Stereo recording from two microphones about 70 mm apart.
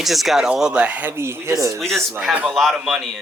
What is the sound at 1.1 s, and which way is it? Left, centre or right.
Speech, right.